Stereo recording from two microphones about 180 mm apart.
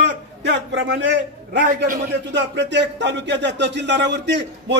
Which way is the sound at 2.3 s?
75° right (ahead or behind).